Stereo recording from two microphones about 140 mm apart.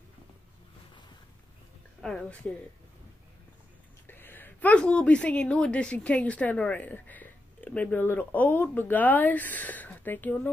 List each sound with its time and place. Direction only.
2.0 s speech: 5° left (ahead or behind)
4.1 s a woman's voice: 15° left (ahead or behind)